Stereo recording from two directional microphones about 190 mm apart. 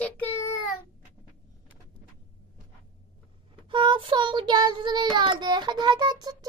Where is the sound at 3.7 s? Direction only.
25° right (ahead or behind).